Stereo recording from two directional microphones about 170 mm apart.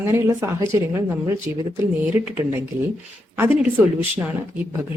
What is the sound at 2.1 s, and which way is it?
Speech, 10° right (ahead or behind).